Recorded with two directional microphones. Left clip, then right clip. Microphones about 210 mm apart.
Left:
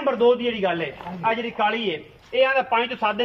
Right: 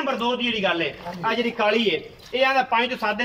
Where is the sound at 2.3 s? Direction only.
10° left (ahead or behind).